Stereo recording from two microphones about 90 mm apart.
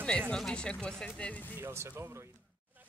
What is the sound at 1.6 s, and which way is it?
Speech, 30° right (ahead or behind).